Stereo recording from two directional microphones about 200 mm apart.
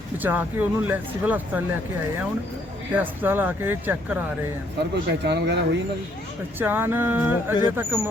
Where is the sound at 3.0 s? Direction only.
10° right (ahead or behind).